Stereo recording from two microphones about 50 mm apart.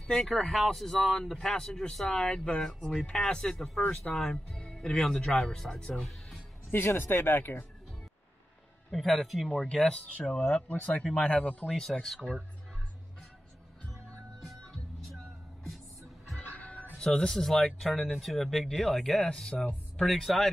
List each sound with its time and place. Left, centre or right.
0.5 s speech: centre
6.7 s speech: left
8.9 s speech: centre
9.6 s speech: centre
10.9 s speech: centre
11.6 s speech: centre
16.4 s music: left
17.0 s speech: centre
20.3 s speech: centre